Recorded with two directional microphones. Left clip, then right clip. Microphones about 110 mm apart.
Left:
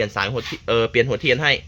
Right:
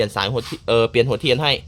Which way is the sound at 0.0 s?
25° right (ahead or behind).